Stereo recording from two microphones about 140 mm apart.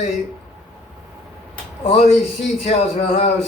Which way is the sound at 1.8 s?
50° left (ahead or behind).